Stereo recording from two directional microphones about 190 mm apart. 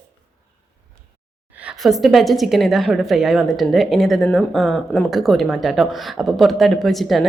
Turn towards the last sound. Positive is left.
turn(degrees=0)  # may be behind; listen again after turning